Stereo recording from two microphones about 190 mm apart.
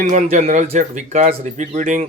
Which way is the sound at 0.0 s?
40° right (ahead or behind).